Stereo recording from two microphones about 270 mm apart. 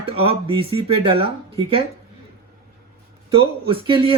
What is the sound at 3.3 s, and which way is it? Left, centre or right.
Speech, centre.